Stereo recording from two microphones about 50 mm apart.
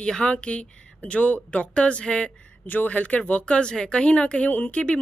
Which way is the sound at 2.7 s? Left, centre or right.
Left.